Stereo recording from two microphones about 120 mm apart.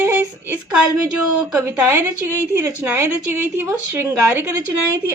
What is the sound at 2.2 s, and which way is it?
A woman's voice, 20° right (ahead or behind).